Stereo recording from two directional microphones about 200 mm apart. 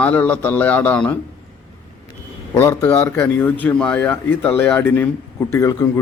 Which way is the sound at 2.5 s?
10° left (ahead or behind).